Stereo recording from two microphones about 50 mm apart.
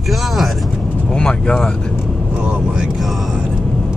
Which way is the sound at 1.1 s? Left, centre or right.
Centre.